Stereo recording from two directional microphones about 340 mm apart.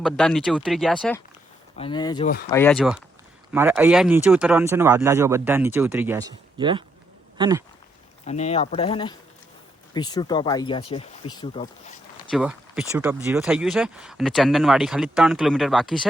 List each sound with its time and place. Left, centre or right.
0.0 s speech: centre
1.7 s speech: centre
8.2 s speech: centre
12.3 s speech: centre